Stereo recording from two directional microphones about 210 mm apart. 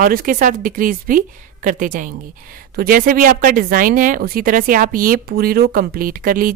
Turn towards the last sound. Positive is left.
turn(degrees=-40)  # may be behind; listen again after turning